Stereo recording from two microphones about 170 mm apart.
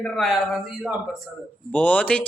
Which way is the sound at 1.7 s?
10° left (ahead or behind).